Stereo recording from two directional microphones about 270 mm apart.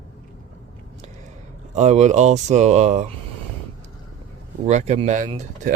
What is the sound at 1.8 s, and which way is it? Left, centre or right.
Speech, right.